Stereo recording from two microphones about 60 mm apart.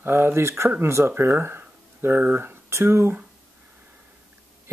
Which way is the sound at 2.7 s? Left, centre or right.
Right.